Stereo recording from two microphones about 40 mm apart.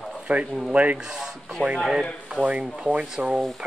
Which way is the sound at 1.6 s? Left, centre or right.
Left.